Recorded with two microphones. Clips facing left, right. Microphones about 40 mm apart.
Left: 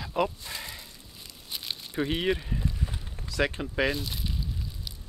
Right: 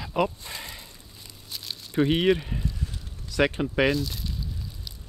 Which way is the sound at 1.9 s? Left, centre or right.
Centre.